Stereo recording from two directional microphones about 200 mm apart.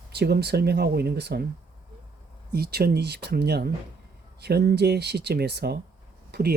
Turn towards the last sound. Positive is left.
turn(degrees=-50)  # may be behind; listen again after turning